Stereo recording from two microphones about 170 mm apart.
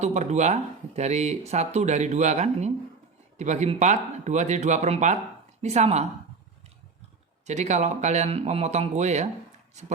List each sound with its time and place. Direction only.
0.0 s speech: 40° right (ahead or behind)
7.4 s speech: 45° right (ahead or behind)